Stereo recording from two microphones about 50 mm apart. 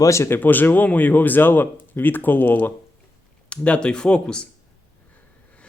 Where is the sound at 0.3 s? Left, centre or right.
Left.